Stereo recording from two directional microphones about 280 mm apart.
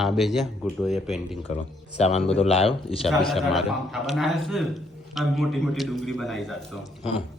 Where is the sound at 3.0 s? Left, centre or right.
Centre.